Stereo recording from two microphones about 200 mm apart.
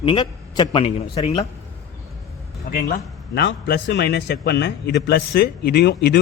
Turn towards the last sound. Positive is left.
turn(degrees=55)  # may be behind; listen again after turning